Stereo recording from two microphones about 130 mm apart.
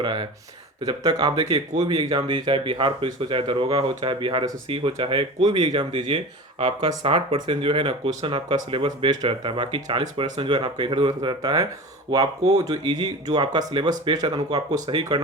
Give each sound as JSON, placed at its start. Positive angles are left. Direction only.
{"t": 0.0, "sound": "speech", "side_deg": -40}
{"t": 2.0, "sound": "speech", "side_deg": -45}